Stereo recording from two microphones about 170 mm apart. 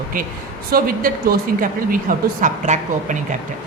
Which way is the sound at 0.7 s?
60° right (ahead or behind).